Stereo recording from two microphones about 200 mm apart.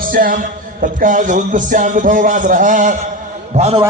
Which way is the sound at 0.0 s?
45° right (ahead or behind).